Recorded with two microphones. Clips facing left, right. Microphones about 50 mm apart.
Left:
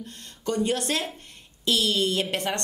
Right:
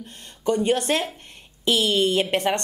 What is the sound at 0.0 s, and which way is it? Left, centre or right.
A woman's voice, right.